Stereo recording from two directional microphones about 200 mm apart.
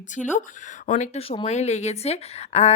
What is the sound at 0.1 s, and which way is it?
Speech, 40° left (ahead or behind).